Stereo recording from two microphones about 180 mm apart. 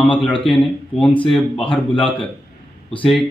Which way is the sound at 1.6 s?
30° left (ahead or behind).